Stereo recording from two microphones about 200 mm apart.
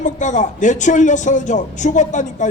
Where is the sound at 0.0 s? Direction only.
35° left (ahead or behind).